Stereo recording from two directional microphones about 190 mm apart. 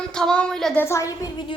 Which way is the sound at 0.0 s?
5° left (ahead or behind).